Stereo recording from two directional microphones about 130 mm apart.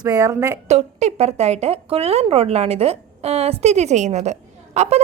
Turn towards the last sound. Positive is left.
turn(degrees=-60)  # may be behind; listen again after turning